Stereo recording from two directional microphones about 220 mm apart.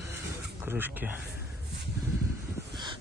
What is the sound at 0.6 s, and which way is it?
Speech, 10° right (ahead or behind).